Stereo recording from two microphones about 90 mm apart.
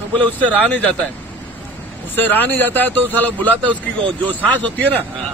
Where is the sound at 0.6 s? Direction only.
15° left (ahead or behind).